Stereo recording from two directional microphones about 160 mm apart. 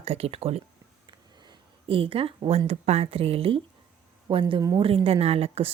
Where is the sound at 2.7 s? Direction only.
40° right (ahead or behind).